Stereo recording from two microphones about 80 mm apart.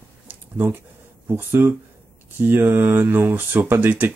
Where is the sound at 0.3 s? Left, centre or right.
Right.